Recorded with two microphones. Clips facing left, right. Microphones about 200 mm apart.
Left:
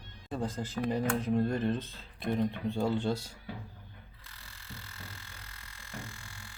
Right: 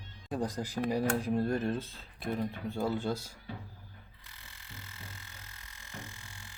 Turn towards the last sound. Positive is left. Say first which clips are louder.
# left 2 dB
turn(degrees=-20)  # may be behind; listen again after turning